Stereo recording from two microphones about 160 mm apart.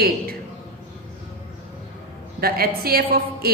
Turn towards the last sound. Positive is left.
turn(degrees=-70)  # may be behind; listen again after turning